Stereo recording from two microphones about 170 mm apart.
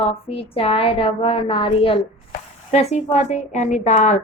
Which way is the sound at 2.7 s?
40° left (ahead or behind).